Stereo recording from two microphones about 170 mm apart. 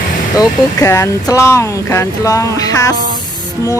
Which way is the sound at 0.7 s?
15° left (ahead or behind).